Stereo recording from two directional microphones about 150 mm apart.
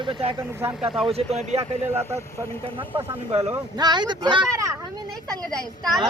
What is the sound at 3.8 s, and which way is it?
Speech, 30° right (ahead or behind).